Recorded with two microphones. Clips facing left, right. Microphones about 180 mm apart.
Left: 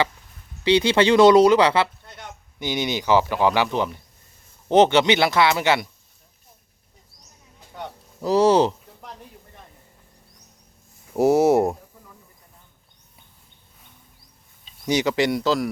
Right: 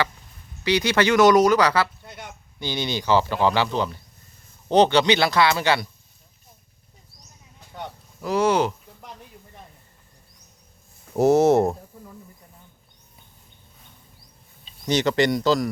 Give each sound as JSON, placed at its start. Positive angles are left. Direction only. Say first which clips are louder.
{"t": 0.6, "sound": "speech", "louder": "left 3 dB", "side_deg": 25}
{"t": 8.2, "sound": "speech", "louder": "left 4 dB", "side_deg": 35}
{"t": 11.1, "sound": "speech", "louder": "even", "side_deg": 10}
{"t": 14.8, "sound": "speech", "louder": "even", "side_deg": 10}